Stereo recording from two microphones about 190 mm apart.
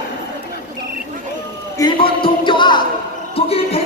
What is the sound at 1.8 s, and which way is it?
Speech, 25° left (ahead or behind).